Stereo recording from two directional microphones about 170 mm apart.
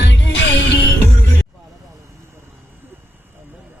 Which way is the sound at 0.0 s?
90° left.